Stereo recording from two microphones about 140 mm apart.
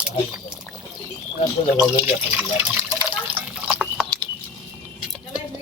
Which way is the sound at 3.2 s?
10° right (ahead or behind).